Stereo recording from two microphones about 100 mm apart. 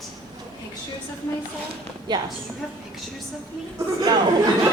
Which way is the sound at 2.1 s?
45° right (ahead or behind).